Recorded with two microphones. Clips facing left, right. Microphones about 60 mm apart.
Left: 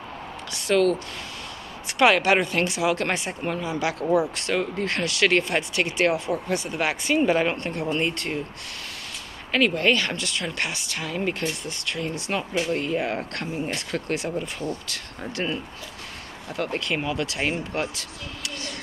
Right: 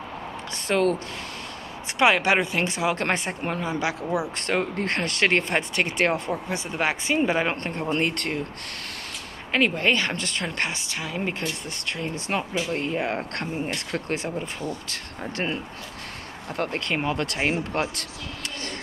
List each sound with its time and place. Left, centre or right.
0.5 s speech: right
2.0 s a woman's voice: right
2.7 s speech: right
3.8 s speech: centre
4.4 s speech: right
6.5 s a woman's voice: right
7.9 s speech: right
9.5 s a woman's voice: right
11.0 s a woman's voice: centre
11.6 s speech: right